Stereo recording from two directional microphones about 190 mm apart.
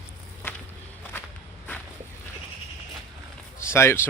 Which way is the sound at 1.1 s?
10° left (ahead or behind).